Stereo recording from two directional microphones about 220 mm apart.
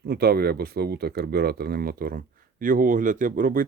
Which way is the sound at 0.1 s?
45° right (ahead or behind).